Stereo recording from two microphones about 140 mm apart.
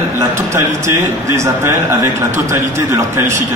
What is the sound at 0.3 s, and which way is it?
A man's voice, 20° right (ahead or behind).